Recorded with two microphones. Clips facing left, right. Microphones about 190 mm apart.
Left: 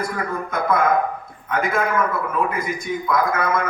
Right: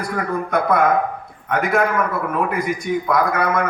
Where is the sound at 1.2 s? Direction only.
70° right (ahead or behind).